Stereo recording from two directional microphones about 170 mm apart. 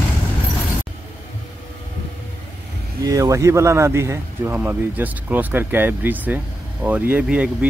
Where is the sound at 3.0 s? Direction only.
20° right (ahead or behind).